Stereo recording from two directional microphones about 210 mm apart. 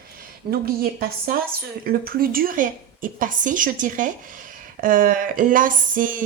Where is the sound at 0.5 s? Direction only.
45° right (ahead or behind).